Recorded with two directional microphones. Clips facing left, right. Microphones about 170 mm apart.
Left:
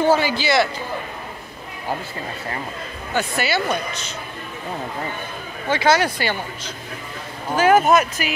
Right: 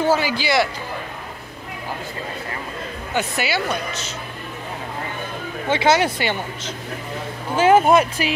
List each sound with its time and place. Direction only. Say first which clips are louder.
0.1 s speech: left 1 dB; 10° right (ahead or behind)
3.2 s speech: left 1 dB; 15° right (ahead or behind)
5.7 s speech: even; 25° right (ahead or behind)